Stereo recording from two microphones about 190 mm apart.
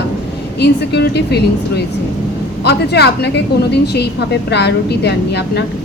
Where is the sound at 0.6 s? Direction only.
60° left (ahead or behind).